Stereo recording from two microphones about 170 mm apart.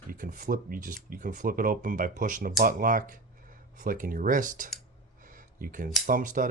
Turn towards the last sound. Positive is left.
turn(degrees=-50)  # may be behind; listen again after turning